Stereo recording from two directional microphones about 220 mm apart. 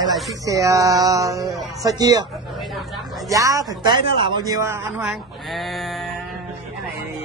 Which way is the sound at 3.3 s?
15° right (ahead or behind).